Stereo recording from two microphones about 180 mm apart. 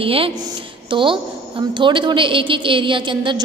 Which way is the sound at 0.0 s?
30° right (ahead or behind).